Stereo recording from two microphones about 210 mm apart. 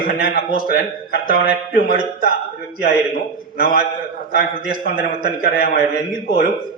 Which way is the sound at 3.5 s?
45° left (ahead or behind).